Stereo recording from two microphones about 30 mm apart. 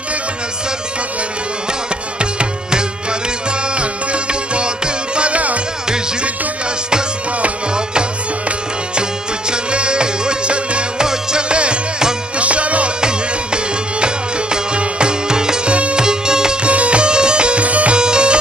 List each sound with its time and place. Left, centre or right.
2.1 s music: right
5.3 s music: right
9.5 s music: right
11.0 s music: right
12.4 s music: right
13.0 s music: right
15.7 s music: right
16.0 s music: right
16.6 s music: right
17.0 s music: right
17.6 s music: right
17.9 s music: right